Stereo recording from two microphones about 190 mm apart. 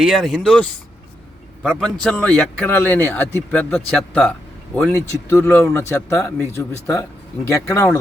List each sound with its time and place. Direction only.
0.0 s a man's voice: centre (ahead or behind); by 7.9 s 15° left (ahead or behind)